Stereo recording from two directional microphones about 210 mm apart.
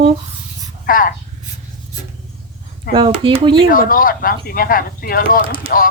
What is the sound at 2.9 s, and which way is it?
Speech, 25° right (ahead or behind).